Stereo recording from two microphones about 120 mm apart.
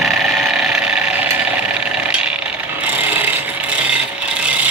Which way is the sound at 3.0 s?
15° right (ahead or behind).